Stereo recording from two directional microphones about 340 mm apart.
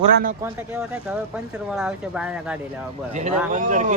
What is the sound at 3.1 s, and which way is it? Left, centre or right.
Speech, right.